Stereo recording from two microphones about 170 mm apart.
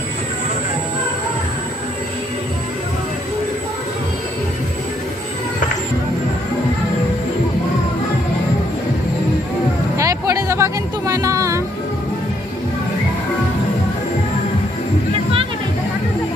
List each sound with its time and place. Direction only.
9.9 s music: 15° right (ahead or behind)